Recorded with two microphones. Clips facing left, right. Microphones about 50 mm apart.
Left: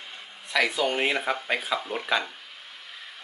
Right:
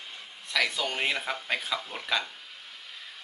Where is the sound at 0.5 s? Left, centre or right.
Centre.